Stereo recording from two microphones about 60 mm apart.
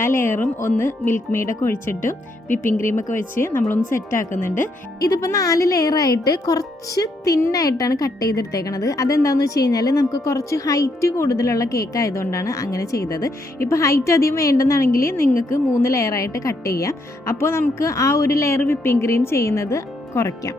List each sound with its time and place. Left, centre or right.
0.0 s speech: left
3.8 s a woman's voice: left
4.4 s speech: left
4.9 s a woman's voice: left
11.2 s a woman's voice: left
15.4 s a woman's voice: left
17.3 s speech: left
17.7 s speech: left
18.6 s speech: left